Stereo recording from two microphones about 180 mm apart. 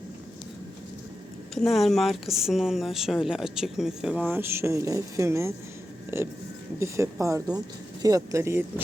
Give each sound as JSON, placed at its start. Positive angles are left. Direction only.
{"t": 1.5, "sound": "speech", "side_deg": 0}